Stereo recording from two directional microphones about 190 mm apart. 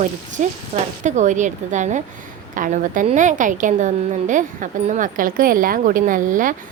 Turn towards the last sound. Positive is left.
turn(degrees=-45)  # may be behind; listen again after turning